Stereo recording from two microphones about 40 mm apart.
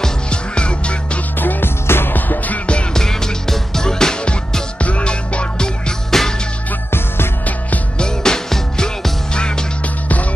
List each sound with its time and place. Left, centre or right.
0.3 s music: left
1.4 s music: left
1.9 s music: left
2.1 s music: left
2.7 s music: left
3.0 s music: centre
4.7 s music: left
6.0 s music: centre
8.0 s music: centre